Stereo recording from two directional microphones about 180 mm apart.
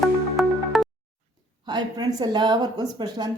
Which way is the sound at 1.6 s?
25° right (ahead or behind).